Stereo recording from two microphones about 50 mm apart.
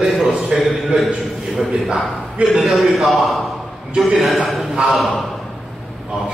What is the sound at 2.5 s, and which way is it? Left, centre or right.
Speech, centre.